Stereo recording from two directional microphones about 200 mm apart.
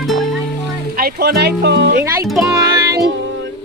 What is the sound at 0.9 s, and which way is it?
Speech, 50° right (ahead or behind).